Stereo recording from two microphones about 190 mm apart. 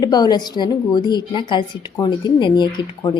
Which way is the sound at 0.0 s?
20° left (ahead or behind).